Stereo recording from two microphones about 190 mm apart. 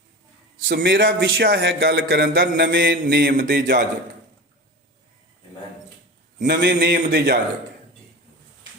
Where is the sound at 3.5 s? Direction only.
60° right (ahead or behind).